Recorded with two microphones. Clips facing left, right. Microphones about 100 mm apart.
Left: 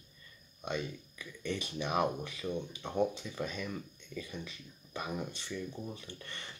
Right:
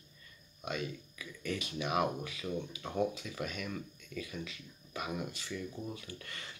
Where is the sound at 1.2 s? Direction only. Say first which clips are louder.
Left 1 dB; 30° left (ahead or behind).